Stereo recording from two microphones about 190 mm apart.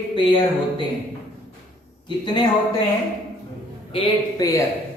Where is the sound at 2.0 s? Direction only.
25° left (ahead or behind).